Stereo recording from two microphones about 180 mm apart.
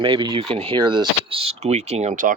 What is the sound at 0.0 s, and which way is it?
Speech, 25° right (ahead or behind).